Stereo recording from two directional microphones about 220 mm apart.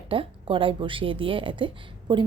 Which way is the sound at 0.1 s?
25° right (ahead or behind).